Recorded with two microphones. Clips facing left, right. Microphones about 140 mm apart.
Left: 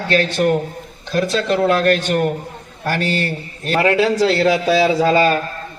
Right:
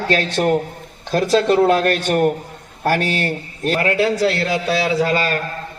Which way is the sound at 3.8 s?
90° left.